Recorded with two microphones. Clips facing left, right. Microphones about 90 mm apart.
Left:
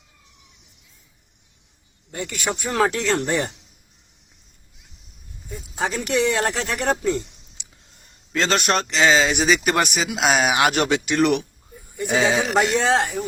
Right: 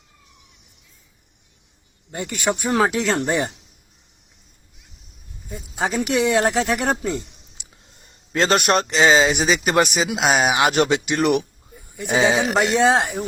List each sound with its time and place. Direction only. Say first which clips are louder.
2.1 s speech: right 3 dB; 25° right (ahead or behind)
5.9 s speech: right 3 dB; 10° right (ahead or behind)
8.3 s speech: right 3 dB; 35° right (ahead or behind)
9.2 s speech: even; centre (ahead or behind)
12.9 s speech: right 1 dB; 20° right (ahead or behind)